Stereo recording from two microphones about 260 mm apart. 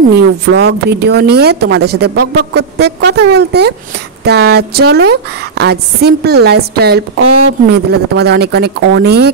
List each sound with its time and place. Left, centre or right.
0.1 s a woman's voice: right